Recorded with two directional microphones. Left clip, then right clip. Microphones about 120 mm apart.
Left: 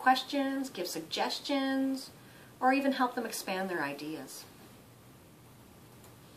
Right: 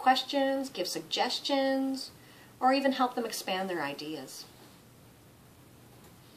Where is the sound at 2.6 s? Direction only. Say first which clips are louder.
Right 2 dB; 35° right (ahead or behind).